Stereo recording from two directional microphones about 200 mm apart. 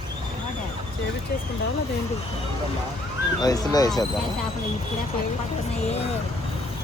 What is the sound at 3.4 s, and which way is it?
Speech, 20° left (ahead or behind).